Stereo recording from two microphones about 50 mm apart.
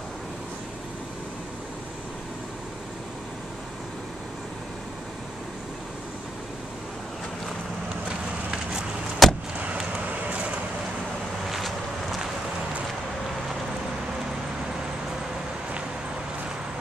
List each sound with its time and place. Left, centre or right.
8.1 s a sound: centre
9.2 s vehicle: centre
9.9 s vehicle: right
11.4 s vehicle: centre